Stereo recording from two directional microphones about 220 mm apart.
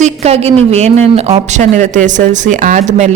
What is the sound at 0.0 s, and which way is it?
A woman's voice, 30° right (ahead or behind).